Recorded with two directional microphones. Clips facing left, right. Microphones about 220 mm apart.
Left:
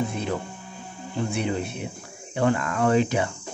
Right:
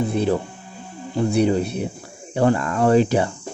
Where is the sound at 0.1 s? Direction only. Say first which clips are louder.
Right 8 dB; 35° right (ahead or behind).